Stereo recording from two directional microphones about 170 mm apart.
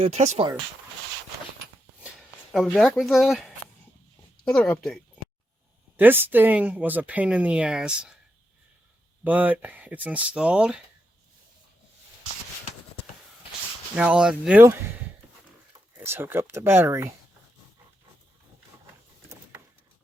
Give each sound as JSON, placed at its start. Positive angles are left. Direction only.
{"t": 0.0, "sound": "speech", "side_deg": -45}
{"t": 2.1, "sound": "speech", "side_deg": 0}
{"t": 6.0, "sound": "speech", "side_deg": -10}
{"t": 9.2, "sound": "speech", "side_deg": -10}
{"t": 13.9, "sound": "speech", "side_deg": -5}
{"t": 16.0, "sound": "speech", "side_deg": -15}